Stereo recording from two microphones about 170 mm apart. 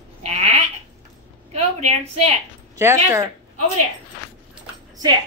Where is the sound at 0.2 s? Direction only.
40° right (ahead or behind).